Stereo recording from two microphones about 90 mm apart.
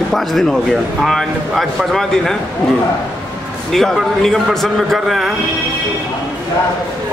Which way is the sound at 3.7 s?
5° left (ahead or behind).